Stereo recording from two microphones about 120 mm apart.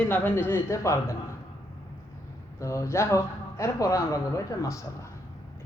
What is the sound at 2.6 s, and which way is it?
Speech, 25° left (ahead or behind).